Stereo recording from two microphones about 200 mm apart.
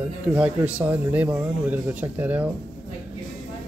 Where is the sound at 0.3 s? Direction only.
5° right (ahead or behind).